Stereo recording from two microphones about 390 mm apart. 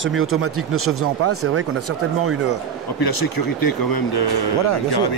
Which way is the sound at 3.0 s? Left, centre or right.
Left.